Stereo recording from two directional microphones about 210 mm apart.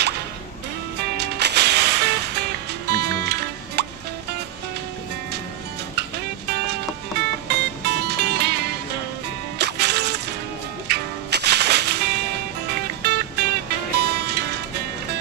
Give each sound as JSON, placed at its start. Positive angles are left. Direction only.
{"t": 1.1, "sound": "music", "side_deg": -55}
{"t": 5.9, "sound": "music", "side_deg": -50}